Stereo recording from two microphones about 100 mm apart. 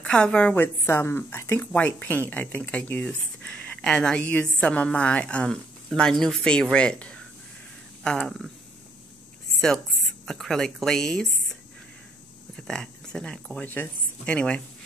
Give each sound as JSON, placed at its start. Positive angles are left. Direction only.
{"t": 0.0, "sound": "speech", "side_deg": 10}
{"t": 0.8, "sound": "a woman's voice", "side_deg": 20}
{"t": 1.6, "sound": "speech", "side_deg": 15}
{"t": 10.2, "sound": "a woman's voice", "side_deg": 5}
{"t": 12.5, "sound": "speech", "side_deg": 5}